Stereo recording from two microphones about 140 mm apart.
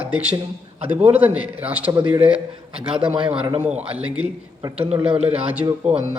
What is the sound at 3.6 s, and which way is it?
Speech, 10° right (ahead or behind).